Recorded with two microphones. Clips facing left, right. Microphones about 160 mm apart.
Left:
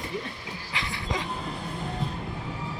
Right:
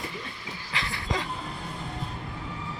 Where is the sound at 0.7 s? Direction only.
20° left (ahead or behind).